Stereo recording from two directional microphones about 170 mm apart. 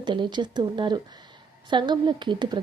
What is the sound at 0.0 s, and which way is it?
A woman's voice, 25° right (ahead or behind).